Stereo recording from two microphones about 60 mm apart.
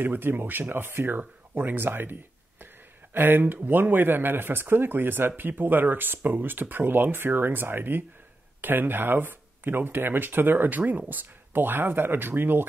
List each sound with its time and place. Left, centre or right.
0.0 s speech: right